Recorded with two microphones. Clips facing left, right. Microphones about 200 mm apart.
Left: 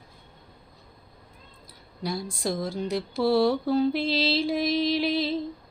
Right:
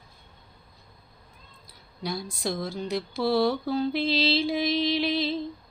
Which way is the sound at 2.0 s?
Centre (ahead or behind).